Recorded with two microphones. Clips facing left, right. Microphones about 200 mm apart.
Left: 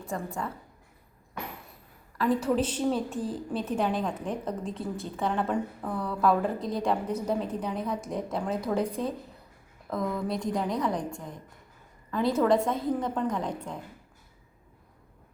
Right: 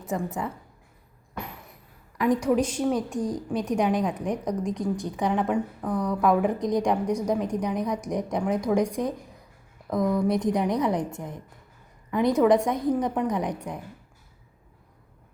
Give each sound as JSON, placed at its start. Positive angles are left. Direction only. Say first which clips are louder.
{"t": 0.1, "sound": "a woman's voice", "louder": "right 5 dB", "side_deg": -20}
{"t": 2.1, "sound": "a woman's voice", "louder": "right 3 dB", "side_deg": -15}